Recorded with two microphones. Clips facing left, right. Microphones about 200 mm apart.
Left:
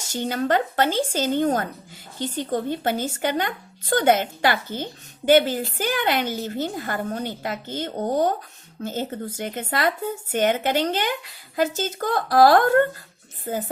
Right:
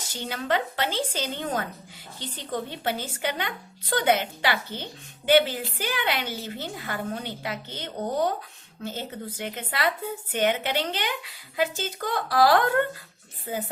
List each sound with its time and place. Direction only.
0.1 s speech: 45° left (ahead or behind)